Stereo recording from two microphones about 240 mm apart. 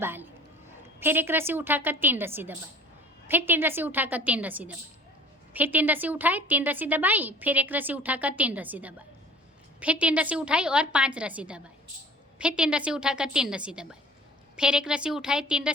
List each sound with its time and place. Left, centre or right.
0.0 s a woman's voice: centre